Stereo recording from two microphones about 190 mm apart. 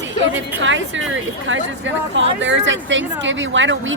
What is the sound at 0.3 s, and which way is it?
Speech, 80° right.